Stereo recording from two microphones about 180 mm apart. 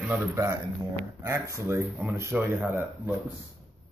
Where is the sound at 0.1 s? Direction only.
15° right (ahead or behind).